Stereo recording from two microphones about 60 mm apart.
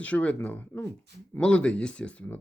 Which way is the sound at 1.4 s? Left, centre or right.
Centre.